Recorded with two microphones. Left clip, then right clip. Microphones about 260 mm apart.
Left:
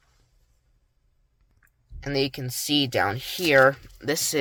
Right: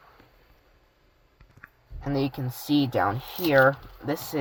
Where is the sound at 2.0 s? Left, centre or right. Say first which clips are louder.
Left 2 dB; left.